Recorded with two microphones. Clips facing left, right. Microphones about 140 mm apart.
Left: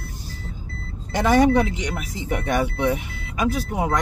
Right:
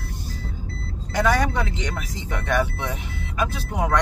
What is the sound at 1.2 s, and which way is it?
Speech, 20° left (ahead or behind).